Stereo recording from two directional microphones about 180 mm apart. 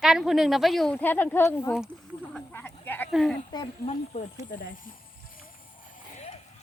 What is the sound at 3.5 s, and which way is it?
Speech, 25° left (ahead or behind).